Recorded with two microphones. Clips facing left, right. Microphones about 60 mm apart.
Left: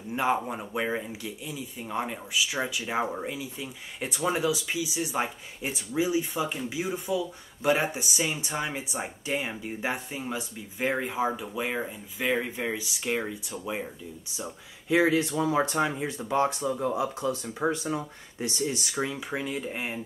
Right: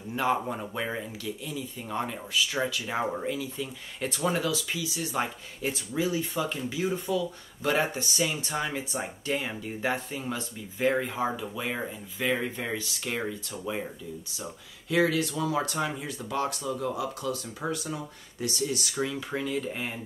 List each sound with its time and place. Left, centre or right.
0.1 s speech: centre
14.9 s speech: left